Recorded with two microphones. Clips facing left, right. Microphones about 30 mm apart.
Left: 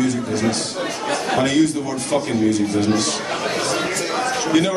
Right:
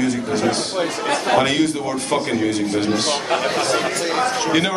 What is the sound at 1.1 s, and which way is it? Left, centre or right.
A man's voice, right.